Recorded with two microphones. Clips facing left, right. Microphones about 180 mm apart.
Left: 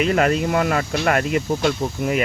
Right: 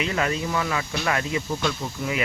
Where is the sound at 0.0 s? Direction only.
55° left (ahead or behind).